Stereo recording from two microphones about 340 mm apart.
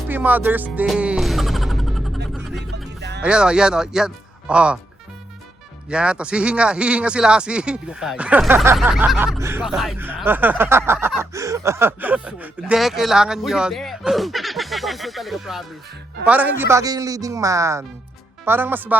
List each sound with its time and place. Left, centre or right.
0.1 s music: centre
3.0 s music: right
3.2 s speech: centre
5.9 s speech: centre